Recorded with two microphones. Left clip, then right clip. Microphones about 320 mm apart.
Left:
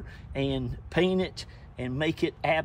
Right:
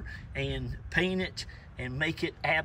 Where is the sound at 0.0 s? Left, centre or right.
Centre.